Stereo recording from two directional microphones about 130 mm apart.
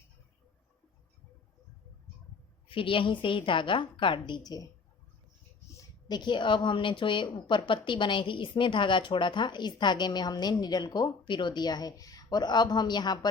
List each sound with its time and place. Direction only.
2.6 s a woman's voice: 40° left (ahead or behind)
5.7 s a woman's voice: 35° left (ahead or behind)